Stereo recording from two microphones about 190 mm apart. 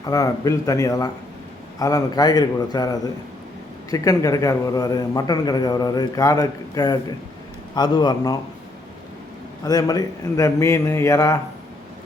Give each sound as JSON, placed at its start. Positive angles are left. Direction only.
{"t": 0.0, "sound": "a man's voice", "side_deg": 20}
{"t": 9.6, "sound": "a man's voice", "side_deg": 20}